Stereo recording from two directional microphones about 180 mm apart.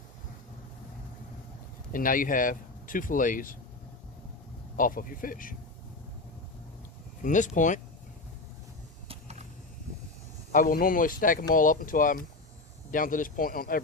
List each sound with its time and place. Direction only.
1.9 s speech: 50° left (ahead or behind)
4.8 s speech: 50° left (ahead or behind)
7.2 s speech: 45° left (ahead or behind)
9.0 s vehicle: 40° right (ahead or behind)
10.5 s speech: 50° left (ahead or behind)